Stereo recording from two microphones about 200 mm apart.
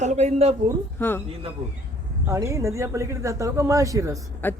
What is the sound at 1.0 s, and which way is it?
Speech, 10° left (ahead or behind).